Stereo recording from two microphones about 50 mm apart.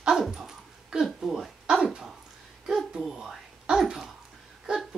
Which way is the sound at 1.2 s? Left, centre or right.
Centre.